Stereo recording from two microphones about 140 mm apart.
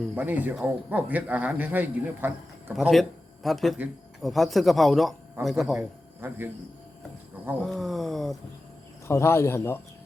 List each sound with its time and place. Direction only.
0.2 s a man's voice: 15° right (ahead or behind)
2.7 s speech: centre (ahead or behind)
6.1 s a man's voice: 15° right (ahead or behind)
7.6 s speech: centre (ahead or behind)
9.0 s speech: 20° left (ahead or behind)